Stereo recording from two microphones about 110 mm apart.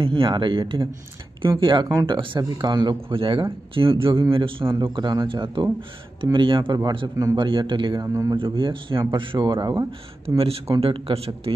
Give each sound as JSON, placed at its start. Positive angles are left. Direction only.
{"t": 0.0, "sound": "a man's voice", "side_deg": -50}
{"t": 8.0, "sound": "speech", "side_deg": -30}
{"t": 8.4, "sound": "a man's voice", "side_deg": -50}
{"t": 10.2, "sound": "a man's voice", "side_deg": -60}